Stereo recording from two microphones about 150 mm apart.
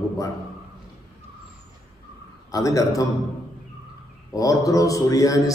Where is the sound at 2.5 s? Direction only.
20° left (ahead or behind).